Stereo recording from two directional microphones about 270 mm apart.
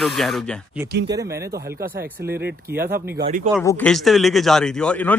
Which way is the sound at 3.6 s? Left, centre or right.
Centre.